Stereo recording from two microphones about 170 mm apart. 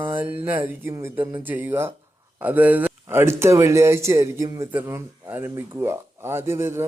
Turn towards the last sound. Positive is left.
turn(degrees=-15)  # may be behind; listen again after turning